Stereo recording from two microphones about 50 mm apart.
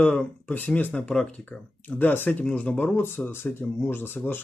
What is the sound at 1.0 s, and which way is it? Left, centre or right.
Speech, centre.